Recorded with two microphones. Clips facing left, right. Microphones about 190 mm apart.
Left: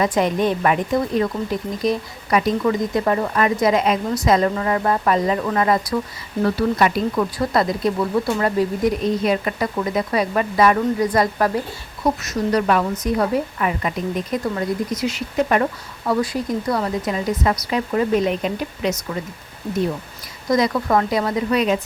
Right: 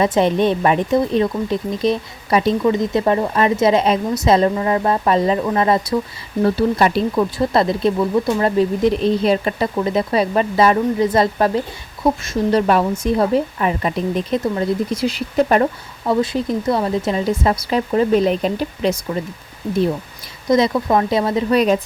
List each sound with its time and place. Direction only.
0.0 s speech: 25° right (ahead or behind)
20.5 s speech: 20° right (ahead or behind)